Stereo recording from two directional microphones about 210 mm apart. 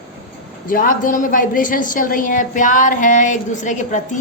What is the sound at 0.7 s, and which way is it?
A woman's voice, 40° left (ahead or behind).